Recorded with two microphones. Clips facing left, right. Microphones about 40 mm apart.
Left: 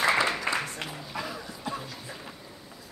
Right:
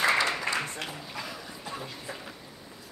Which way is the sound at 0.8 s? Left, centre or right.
Centre.